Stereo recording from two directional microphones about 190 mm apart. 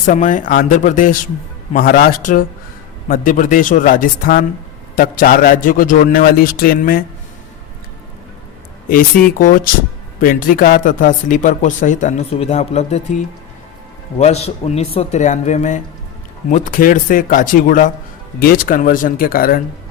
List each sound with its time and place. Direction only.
0.0 s speech: 40° left (ahead or behind)
8.9 s speech: 45° left (ahead or behind)
14.2 s speech: 35° left (ahead or behind)